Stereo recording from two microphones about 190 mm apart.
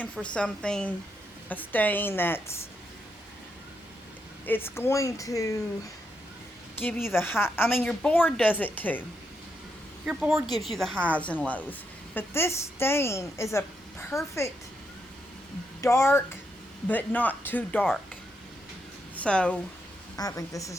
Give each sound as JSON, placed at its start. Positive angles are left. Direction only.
{"t": 0.0, "sound": "a woman's voice", "side_deg": 5}
{"t": 4.4, "sound": "speech", "side_deg": 10}
{"t": 6.7, "sound": "speech", "side_deg": 10}
{"t": 10.1, "sound": "a woman's voice", "side_deg": -5}
{"t": 14.1, "sound": "a woman's voice", "side_deg": 0}
{"t": 15.8, "sound": "speech", "side_deg": 15}
{"t": 19.2, "sound": "a woman's voice", "side_deg": 5}
{"t": 20.1, "sound": "speech", "side_deg": 20}